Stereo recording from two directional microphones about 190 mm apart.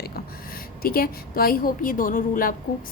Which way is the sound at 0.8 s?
50° left (ahead or behind).